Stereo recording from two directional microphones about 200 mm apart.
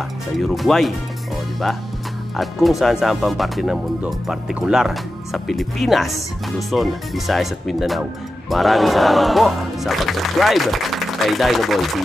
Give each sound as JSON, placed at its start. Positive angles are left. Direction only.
{"t": 0.4, "sound": "speech", "side_deg": 0}